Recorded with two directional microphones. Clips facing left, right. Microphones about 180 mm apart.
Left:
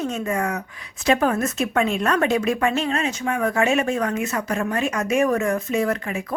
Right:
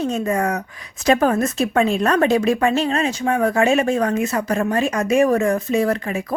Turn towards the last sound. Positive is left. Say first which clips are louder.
# right 3 dB
turn(degrees=-35)  # may be behind; listen again after turning